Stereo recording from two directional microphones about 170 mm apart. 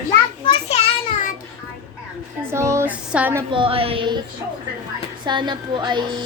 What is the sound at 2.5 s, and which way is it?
Speech, 15° right (ahead or behind).